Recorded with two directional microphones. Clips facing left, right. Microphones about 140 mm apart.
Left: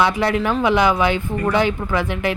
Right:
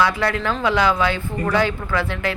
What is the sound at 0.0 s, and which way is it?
A woman's voice, 20° left (ahead or behind).